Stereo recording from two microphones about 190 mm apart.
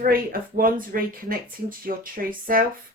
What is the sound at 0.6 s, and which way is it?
Speech, 50° right (ahead or behind).